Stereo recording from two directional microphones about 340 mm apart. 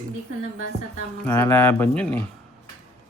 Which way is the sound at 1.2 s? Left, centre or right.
Centre.